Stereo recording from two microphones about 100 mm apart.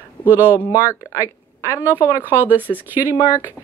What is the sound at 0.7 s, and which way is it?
Speech, 40° left (ahead or behind).